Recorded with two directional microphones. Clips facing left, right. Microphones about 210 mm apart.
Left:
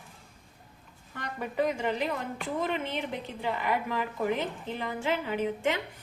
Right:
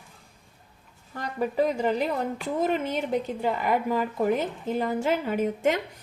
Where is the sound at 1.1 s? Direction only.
35° right (ahead or behind).